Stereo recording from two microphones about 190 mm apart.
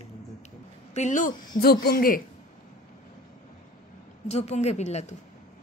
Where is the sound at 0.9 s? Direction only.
40° left (ahead or behind).